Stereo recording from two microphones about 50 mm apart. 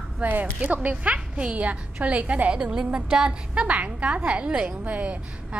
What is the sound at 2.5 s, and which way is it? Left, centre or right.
A woman's voice, centre.